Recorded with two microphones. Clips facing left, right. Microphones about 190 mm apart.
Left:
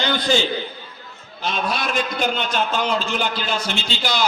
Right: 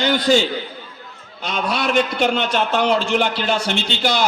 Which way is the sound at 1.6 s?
65° right (ahead or behind).